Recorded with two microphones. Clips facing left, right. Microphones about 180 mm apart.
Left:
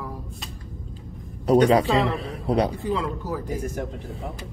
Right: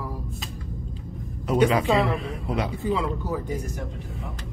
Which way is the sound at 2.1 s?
35° left (ahead or behind).